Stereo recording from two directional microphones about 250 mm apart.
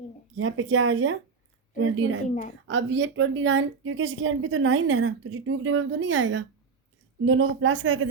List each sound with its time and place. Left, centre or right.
0.3 s a woman's voice: right